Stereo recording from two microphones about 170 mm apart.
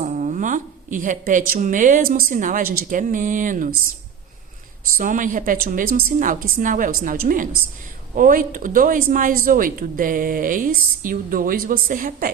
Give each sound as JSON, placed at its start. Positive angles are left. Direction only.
{"t": 0.0, "sound": "a woman's voice", "side_deg": -45}
{"t": 4.9, "sound": "a woman's voice", "side_deg": -50}